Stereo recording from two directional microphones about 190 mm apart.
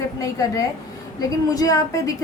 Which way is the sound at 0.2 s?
20° left (ahead or behind).